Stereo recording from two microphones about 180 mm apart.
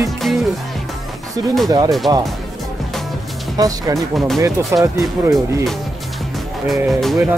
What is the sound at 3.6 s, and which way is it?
Speech, 20° right (ahead or behind).